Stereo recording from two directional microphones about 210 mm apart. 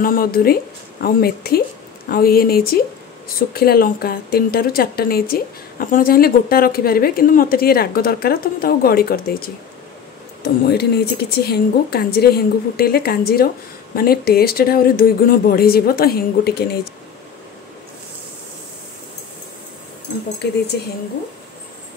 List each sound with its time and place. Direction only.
0.0 s a woman's voice: 40° left (ahead or behind)